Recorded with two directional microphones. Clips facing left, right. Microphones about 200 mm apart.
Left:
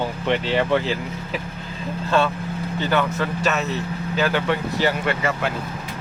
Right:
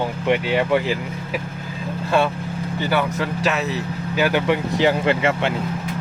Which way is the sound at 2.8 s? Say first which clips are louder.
Even; 10° right (ahead or behind).